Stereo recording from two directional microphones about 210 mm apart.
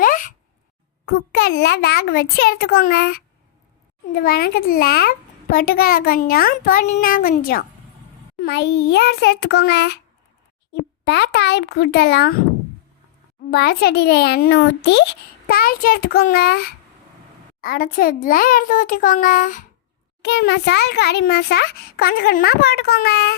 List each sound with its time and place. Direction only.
0.0 s a sound: 40° left (ahead or behind)
1.0 s a child's voice: 50° left (ahead or behind)
13.5 s a child's voice: 50° left (ahead or behind)
20.2 s a child's voice: 55° left (ahead or behind)